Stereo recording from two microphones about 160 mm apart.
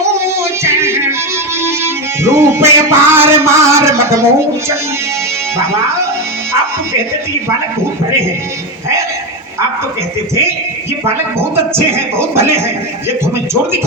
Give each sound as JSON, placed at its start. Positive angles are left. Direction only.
{"t": 0.6, "sound": "music", "side_deg": -15}
{"t": 11.0, "sound": "speech", "side_deg": -15}